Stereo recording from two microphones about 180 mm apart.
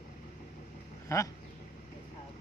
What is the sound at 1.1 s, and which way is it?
Speech, 15° left (ahead or behind).